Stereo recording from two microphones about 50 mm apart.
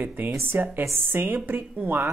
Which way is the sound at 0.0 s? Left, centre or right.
Right.